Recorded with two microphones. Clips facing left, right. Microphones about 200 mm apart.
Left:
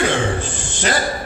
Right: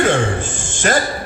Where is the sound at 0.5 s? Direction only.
50° right (ahead or behind).